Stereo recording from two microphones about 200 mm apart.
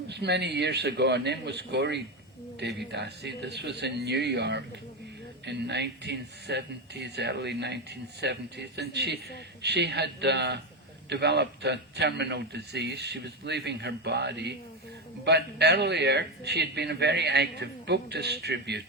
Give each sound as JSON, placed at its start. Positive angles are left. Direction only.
{"t": 0.1, "sound": "speech", "side_deg": -60}